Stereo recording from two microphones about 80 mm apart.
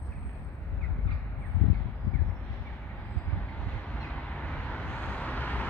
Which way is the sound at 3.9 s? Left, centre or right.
Centre.